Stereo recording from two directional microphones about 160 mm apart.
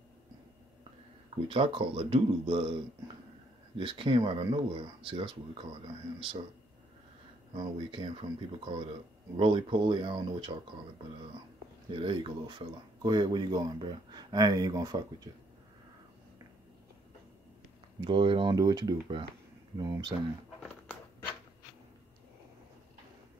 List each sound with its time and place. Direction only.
1.5 s speech: 35° right (ahead or behind)
7.5 s speech: 30° right (ahead or behind)
11.9 s speech: 35° right (ahead or behind)
18.0 s speech: 30° right (ahead or behind)